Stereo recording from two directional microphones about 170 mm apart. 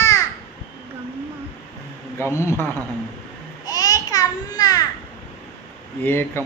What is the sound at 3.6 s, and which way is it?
Babbling, 20° left (ahead or behind).